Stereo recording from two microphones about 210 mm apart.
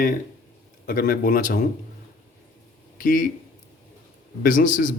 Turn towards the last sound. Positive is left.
turn(degrees=40)  # may be behind; listen again after turning